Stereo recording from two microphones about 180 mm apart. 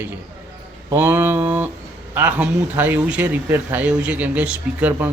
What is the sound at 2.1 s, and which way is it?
Speech, 10° right (ahead or behind).